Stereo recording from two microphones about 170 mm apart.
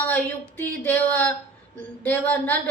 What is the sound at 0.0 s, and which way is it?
A woman's voice, 10° left (ahead or behind).